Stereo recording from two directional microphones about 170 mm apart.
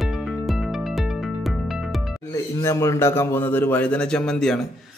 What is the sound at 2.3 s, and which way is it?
A man's voice, 20° left (ahead or behind).